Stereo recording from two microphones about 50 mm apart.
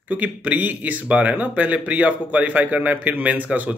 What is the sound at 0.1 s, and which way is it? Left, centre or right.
Speech, right.